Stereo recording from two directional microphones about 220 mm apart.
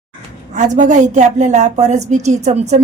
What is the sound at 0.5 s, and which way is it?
A woman's voice, 35° right (ahead or behind).